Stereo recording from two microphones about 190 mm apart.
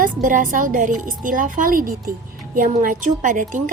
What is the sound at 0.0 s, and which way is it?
A woman's voice, 45° right (ahead or behind).